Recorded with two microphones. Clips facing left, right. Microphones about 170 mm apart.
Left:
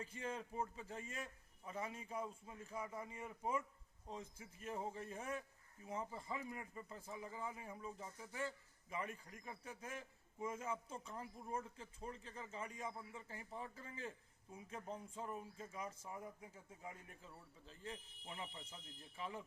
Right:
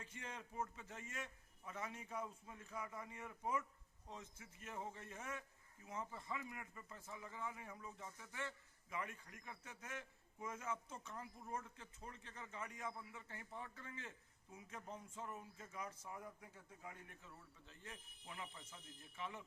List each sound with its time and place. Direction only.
0.0 s speech: 30° left (ahead or behind)